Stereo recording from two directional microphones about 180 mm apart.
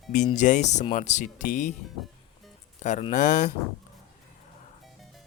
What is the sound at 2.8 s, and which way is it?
Speech, 40° left (ahead or behind).